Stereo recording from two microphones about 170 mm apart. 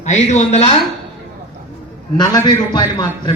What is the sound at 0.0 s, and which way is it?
Speech, 45° left (ahead or behind).